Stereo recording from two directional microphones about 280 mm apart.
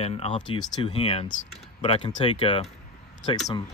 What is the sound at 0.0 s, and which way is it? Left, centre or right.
Speech, left.